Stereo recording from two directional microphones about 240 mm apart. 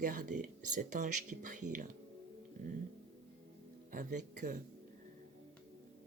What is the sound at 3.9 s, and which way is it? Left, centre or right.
Speech, right.